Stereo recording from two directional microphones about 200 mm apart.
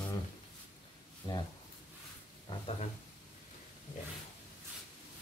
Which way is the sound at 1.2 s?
20° left (ahead or behind).